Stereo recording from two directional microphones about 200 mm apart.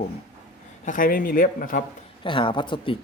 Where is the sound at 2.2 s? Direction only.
25° left (ahead or behind).